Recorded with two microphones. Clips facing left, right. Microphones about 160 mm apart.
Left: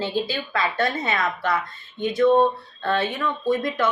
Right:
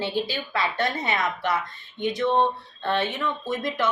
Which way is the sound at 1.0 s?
20° right (ahead or behind).